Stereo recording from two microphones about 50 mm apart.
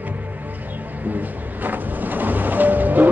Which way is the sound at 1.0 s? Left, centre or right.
Right.